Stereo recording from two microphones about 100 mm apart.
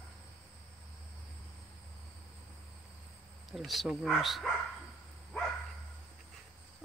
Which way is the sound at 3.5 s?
Centre (ahead or behind).